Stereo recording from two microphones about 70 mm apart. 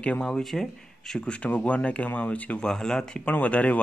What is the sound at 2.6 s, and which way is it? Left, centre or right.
Speech, centre.